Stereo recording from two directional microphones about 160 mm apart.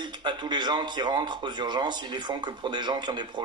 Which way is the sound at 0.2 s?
30° right (ahead or behind).